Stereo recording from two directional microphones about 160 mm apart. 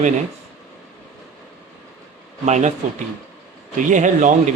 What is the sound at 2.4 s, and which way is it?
Speech, 45° right (ahead or behind).